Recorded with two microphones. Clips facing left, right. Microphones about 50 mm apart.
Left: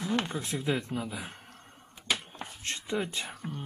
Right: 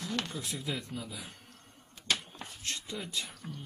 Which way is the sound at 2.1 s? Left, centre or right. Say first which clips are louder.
Left 1 dB; centre.